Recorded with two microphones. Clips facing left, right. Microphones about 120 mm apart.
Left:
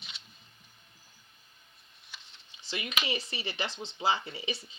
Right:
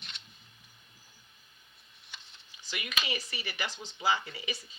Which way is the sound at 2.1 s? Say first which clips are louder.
Even; centre (ahead or behind).